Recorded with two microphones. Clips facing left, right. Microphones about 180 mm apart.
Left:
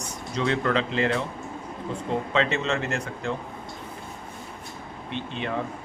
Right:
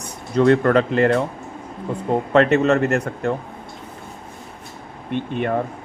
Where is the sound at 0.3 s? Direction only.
55° right (ahead or behind).